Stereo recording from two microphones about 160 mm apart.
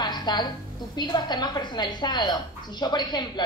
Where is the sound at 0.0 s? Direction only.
25° left (ahead or behind).